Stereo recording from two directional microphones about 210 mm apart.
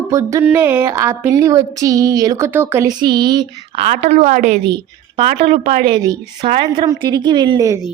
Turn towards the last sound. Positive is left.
turn(degrees=-20)  # may be behind; listen again after turning